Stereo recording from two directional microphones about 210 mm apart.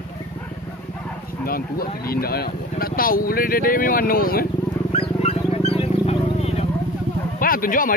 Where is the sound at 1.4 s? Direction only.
45° left (ahead or behind).